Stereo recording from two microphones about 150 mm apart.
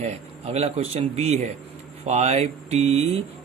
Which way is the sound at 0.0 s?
45° right (ahead or behind).